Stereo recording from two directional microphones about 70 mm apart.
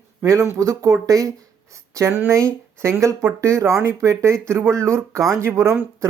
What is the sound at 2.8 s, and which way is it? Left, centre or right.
Speech, right.